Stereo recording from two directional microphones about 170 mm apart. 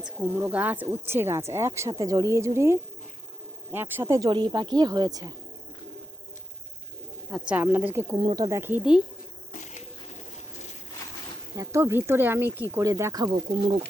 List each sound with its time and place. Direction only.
0.0 s speech: 10° right (ahead or behind)
7.3 s speech: 5° right (ahead or behind)
8.1 s speech: 25° right (ahead or behind)
8.4 s speech: 15° right (ahead or behind)
9.5 s a sound: 45° left (ahead or behind)
11.5 s speech: 20° right (ahead or behind)
13.5 s speech: 35° right (ahead or behind)